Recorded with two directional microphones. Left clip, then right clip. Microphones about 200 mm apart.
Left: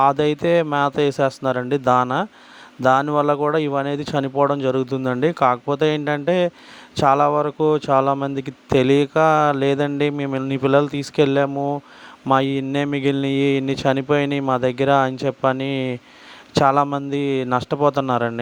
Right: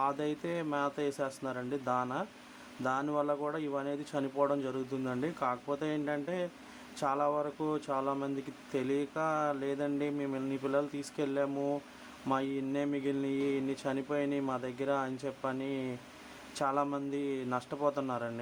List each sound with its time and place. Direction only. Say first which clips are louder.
0.0 s a man's voice: left 17 dB; 40° left (ahead or behind)